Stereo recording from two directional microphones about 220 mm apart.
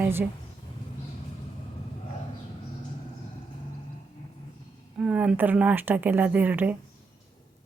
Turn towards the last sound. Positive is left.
turn(degrees=-5)  # may be behind; listen again after turning